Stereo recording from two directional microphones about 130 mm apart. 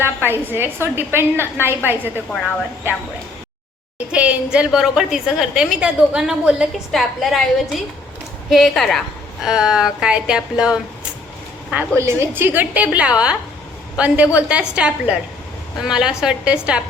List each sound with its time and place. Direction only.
0.0 s a woman's voice: 15° right (ahead or behind)
3.9 s a woman's voice: 10° right (ahead or behind)
8.4 s a woman's voice: centre (ahead or behind)
11.7 s a woman's voice: 15° right (ahead or behind)